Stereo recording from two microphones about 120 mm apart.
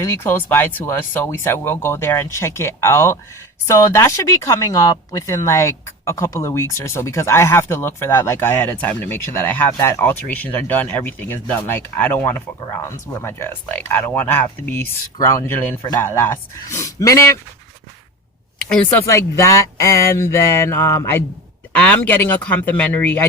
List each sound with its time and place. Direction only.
0.0 s speech: 20° left (ahead or behind)
18.6 s speech: 10° left (ahead or behind)
19.0 s speech: 25° left (ahead or behind)